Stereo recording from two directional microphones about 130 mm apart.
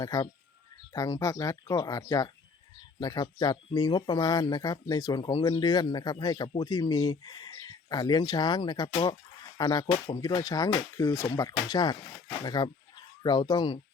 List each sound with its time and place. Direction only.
0.0 s speech: 30° left (ahead or behind)